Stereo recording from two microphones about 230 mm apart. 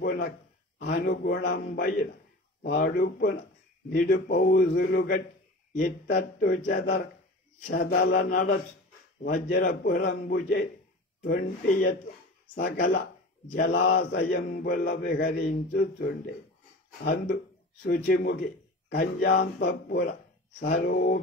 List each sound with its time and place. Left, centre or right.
0.0 s a man's voice: left
0.7 s mantra: left
2.6 s speech: left
3.9 s mantra: left
6.1 s speech: left
7.6 s speech: left
8.3 s mantra: left
17.0 s a man's voice: left
19.4 s mantra: left